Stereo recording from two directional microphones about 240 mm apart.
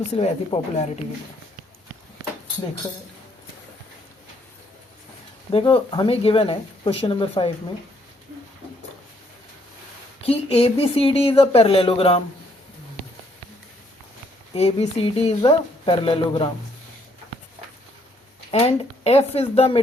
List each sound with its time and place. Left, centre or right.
0.1 s speech: left
5.5 s speech: left
10.2 s speech: left
14.5 s speech: left
18.5 s speech: left